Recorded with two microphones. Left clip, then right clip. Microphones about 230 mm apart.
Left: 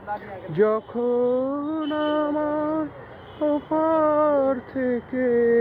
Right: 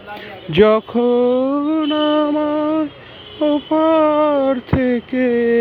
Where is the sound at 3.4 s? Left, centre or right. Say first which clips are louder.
Right 7 dB; right.